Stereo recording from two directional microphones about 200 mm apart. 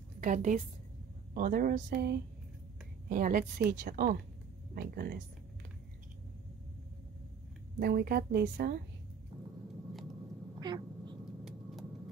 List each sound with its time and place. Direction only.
0.2 s a woman's voice: 40° right (ahead or behind)
7.8 s speech: 50° right (ahead or behind)
10.6 s quack: 20° right (ahead or behind)